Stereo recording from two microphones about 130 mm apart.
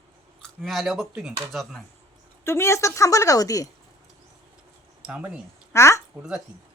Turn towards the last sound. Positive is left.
turn(degrees=20)  # may be behind; listen again after turning